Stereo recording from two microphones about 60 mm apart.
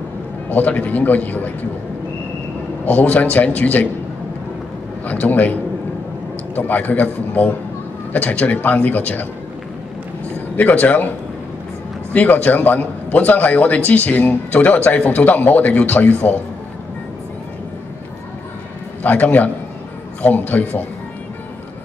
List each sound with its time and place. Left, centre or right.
0.5 s a man's voice: left
2.8 s a man's voice: left
5.0 s a man's voice: left
10.5 s a man's voice: left
12.1 s a man's voice: left
19.0 s a man's voice: left